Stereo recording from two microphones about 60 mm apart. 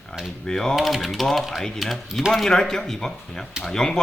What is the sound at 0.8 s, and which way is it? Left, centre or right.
Speech, centre.